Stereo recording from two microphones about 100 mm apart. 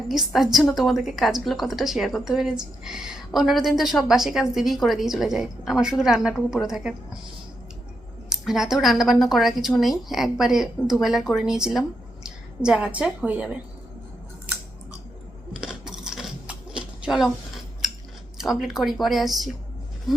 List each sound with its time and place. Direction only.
0.1 s a woman's voice: 5° right (ahead or behind)
8.3 s a woman's voice: 5° right (ahead or behind)
15.6 s a sound: 5° right (ahead or behind)
18.3 s a woman's voice: 5° right (ahead or behind)